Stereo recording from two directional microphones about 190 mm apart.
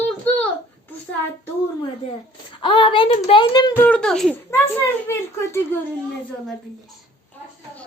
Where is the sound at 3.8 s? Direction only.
5° left (ahead or behind).